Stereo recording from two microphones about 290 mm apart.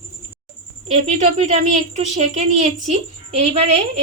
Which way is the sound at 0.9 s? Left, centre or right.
Right.